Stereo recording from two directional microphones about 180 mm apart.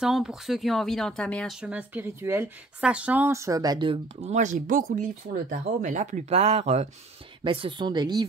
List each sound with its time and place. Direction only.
0.0 s speech: centre (ahead or behind)
1.6 s speech: 10° right (ahead or behind)